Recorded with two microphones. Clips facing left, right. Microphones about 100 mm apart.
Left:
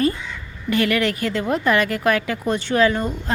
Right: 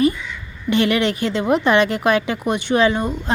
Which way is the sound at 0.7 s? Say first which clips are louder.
Right 2 dB; 25° right (ahead or behind).